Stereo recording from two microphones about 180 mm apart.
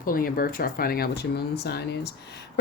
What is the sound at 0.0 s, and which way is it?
Speech, 55° left (ahead or behind).